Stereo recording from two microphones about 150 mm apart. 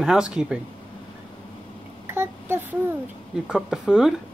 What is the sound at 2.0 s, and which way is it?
Speech, 15° right (ahead or behind).